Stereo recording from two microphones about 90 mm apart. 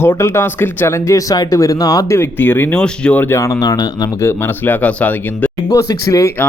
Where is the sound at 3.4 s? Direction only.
40° left (ahead or behind).